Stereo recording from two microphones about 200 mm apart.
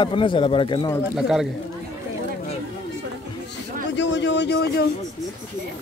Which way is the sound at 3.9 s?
65° left (ahead or behind).